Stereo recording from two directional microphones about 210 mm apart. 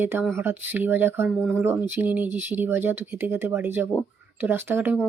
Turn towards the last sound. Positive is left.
turn(degrees=-10)  # may be behind; listen again after turning